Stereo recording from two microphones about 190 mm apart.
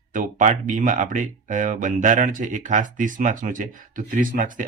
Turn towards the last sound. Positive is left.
turn(degrees=-45)  # may be behind; listen again after turning